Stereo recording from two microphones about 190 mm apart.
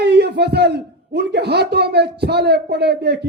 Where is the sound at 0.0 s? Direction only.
60° right (ahead or behind).